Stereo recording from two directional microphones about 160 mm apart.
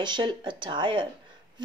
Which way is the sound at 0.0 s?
30° right (ahead or behind).